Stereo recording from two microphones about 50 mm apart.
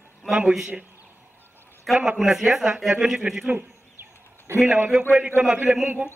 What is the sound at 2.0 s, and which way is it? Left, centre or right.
A man's voice, centre.